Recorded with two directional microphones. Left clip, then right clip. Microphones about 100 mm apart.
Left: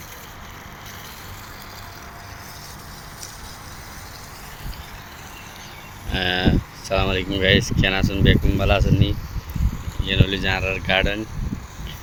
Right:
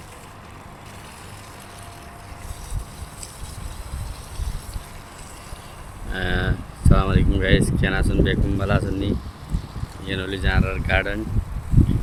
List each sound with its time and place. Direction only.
6.1 s sheep: 5° right (ahead or behind)
7.3 s speech: 15° right (ahead or behind)